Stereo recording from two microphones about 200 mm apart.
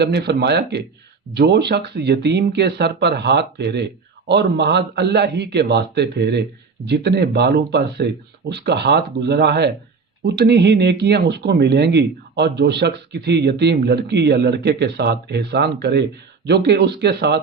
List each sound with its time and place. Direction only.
0.0 s speech: 55° right (ahead or behind)